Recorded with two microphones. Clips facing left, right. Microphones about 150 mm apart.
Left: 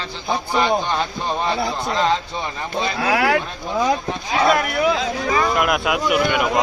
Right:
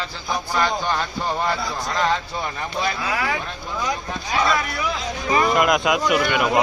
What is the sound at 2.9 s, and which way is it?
Speech, 65° left (ahead or behind).